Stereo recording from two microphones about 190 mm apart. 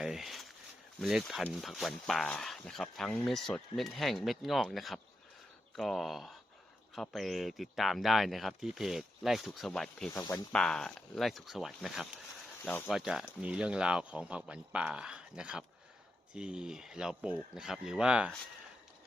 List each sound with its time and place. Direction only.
0.0 s a sound: centre (ahead or behind)
0.9 s speech: centre (ahead or behind)
10.1 s speech: 15° left (ahead or behind)
10.5 s speech: 5° left (ahead or behind)
12.6 s speech: 10° left (ahead or behind)
12.9 s speech: centre (ahead or behind)